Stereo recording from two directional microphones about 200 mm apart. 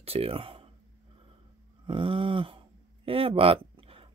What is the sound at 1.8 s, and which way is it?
Speech, 25° right (ahead or behind).